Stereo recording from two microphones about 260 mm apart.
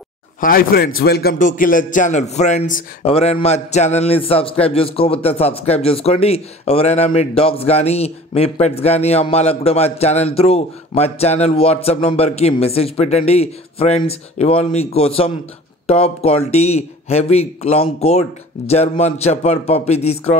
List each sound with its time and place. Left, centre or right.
0.4 s a man's voice: left